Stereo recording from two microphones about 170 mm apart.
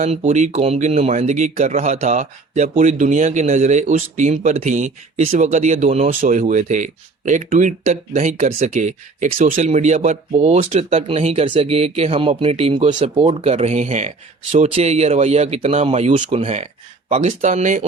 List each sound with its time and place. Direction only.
0.0 s speech: 40° right (ahead or behind)